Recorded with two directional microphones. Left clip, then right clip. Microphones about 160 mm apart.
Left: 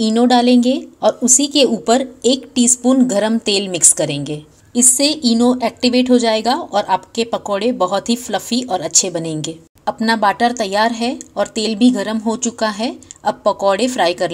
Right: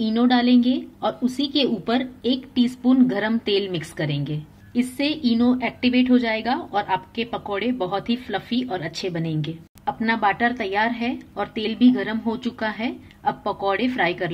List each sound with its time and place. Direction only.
0.0 s a woman's voice: 35° left (ahead or behind)